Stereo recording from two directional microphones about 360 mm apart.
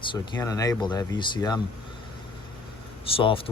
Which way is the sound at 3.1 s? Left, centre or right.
Centre.